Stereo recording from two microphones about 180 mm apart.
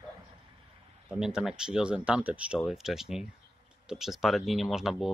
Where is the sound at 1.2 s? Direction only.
5° right (ahead or behind).